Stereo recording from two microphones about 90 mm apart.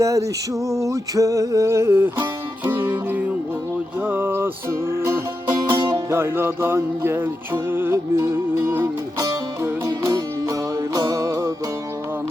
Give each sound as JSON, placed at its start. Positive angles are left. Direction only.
{"t": 0.0, "sound": "a sound", "side_deg": -35}
{"t": 2.6, "sound": "music", "side_deg": -20}
{"t": 8.8, "sound": "music", "side_deg": -35}